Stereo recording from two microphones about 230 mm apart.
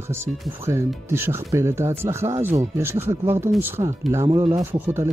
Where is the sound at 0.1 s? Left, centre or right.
Centre.